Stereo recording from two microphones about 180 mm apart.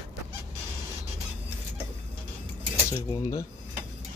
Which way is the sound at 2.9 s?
20° left (ahead or behind).